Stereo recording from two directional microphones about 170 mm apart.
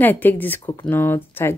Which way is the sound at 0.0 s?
10° left (ahead or behind).